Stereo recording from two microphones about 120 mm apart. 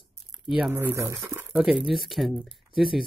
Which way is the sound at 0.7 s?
20° right (ahead or behind).